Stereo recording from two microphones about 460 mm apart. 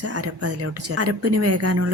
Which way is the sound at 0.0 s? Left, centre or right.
Right.